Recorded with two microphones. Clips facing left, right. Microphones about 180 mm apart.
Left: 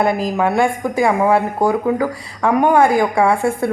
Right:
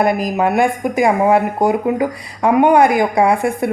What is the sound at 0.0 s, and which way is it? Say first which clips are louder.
A woman's voice: right 1 dB; 15° right (ahead or behind).